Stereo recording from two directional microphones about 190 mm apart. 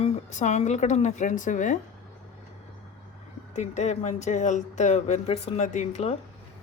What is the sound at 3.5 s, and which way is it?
Speech, 35° left (ahead or behind).